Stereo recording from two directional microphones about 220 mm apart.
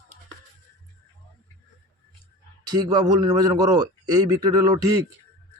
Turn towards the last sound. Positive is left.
turn(degrees=-15)  # may be behind; listen again after turning